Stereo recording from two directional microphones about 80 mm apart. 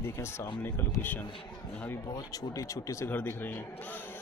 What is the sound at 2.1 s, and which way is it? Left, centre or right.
Speech, left.